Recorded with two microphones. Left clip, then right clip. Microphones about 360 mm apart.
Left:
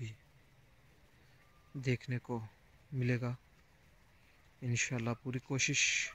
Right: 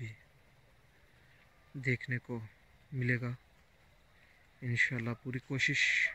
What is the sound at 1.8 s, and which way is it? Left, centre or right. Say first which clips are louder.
Speech: right 4 dB; centre.